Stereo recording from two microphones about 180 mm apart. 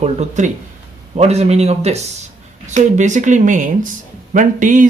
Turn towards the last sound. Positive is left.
turn(degrees=-45)  # may be behind; listen again after turning